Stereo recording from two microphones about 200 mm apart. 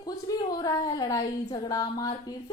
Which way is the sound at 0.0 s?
20° left (ahead or behind).